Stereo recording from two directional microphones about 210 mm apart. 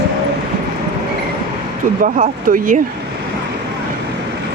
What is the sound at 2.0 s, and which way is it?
Speech, 35° right (ahead or behind).